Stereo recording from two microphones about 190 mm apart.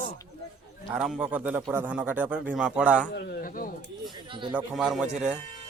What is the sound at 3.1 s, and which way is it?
Speech, 55° left (ahead or behind).